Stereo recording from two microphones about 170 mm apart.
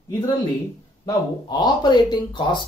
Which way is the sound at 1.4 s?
25° left (ahead or behind).